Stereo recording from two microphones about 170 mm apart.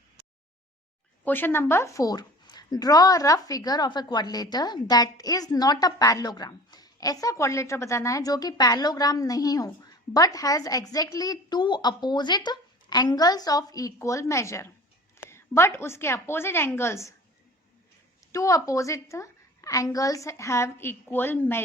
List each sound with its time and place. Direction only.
1.2 s a woman's voice: 10° left (ahead or behind)
18.3 s a woman's voice: 20° left (ahead or behind)